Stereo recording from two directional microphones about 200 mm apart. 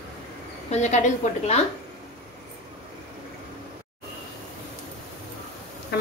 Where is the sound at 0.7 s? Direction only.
35° left (ahead or behind).